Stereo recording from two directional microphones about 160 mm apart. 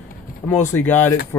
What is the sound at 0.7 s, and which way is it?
Speech, 15° left (ahead or behind).